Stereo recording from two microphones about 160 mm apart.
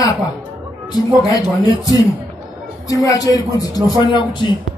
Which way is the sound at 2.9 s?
25° left (ahead or behind).